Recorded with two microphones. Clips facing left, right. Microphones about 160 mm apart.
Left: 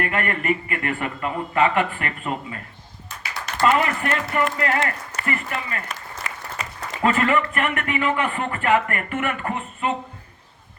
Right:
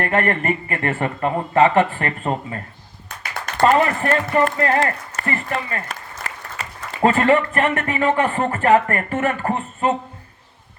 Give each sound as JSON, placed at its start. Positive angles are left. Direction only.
{"t": 0.0, "sound": "speech", "side_deg": -40}
{"t": 6.3, "sound": "applause", "side_deg": -40}
{"t": 7.0, "sound": "speech", "side_deg": -35}